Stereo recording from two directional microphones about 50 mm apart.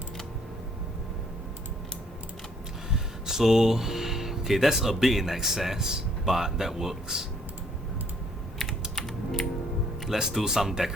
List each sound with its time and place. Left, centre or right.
2.9 s speech: centre
8.5 s typing: centre
10.1 s speech: centre